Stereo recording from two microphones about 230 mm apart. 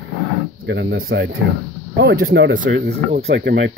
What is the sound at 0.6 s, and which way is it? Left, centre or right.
Speech, right.